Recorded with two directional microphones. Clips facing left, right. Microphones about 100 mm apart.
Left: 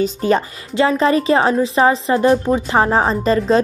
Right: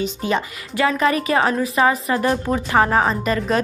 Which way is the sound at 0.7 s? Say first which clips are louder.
Left 4 dB; 30° left (ahead or behind).